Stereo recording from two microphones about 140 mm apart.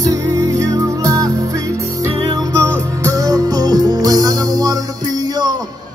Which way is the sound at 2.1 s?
35° right (ahead or behind).